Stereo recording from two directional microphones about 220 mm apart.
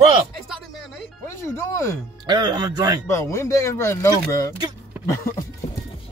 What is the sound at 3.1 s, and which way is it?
Speech, 10° left (ahead or behind).